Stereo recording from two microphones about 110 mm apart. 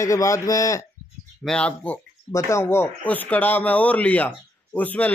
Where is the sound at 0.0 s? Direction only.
30° left (ahead or behind).